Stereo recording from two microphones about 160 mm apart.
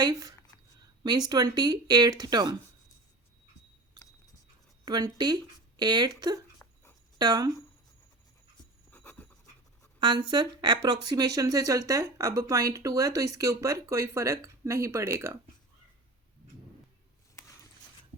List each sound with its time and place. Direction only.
0.0 s speech: 25° right (ahead or behind)
4.9 s speech: 25° right (ahead or behind)
6.6 s dog: 15° left (ahead or behind)
7.2 s speech: 25° right (ahead or behind)
8.9 s pant: 10° left (ahead or behind)
10.0 s speech: 30° right (ahead or behind)